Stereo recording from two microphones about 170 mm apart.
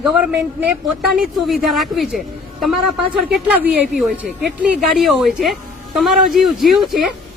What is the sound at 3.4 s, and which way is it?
A woman's voice, 10° right (ahead or behind).